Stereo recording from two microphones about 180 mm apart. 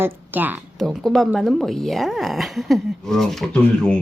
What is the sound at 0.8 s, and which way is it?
Speech, centre (ahead or behind).